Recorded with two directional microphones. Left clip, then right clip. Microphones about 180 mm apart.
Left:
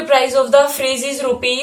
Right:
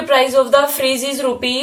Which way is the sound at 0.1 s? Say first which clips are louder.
Even; 40° right (ahead or behind).